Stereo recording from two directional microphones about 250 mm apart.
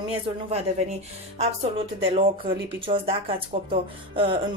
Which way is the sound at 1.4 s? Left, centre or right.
Right.